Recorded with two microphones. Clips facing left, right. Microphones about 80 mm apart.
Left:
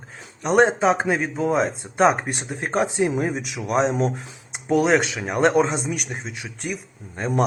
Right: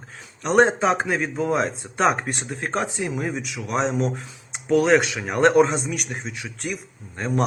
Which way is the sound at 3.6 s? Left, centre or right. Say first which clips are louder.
Left 3 dB; centre.